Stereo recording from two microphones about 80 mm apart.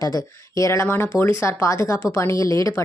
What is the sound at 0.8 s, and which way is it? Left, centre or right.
A woman's voice, left.